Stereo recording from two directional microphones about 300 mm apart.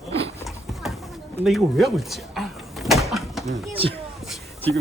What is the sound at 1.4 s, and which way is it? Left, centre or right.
Door, centre.